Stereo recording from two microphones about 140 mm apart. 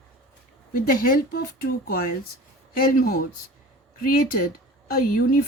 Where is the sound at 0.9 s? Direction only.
90° left.